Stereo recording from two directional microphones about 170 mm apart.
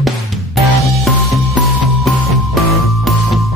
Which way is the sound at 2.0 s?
Centre (ahead or behind).